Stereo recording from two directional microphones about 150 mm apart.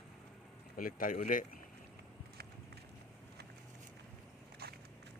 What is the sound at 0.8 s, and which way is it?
Speech, 70° left (ahead or behind).